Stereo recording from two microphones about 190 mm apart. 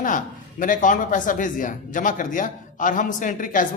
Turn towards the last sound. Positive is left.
turn(degrees=45)  # may be behind; listen again after turning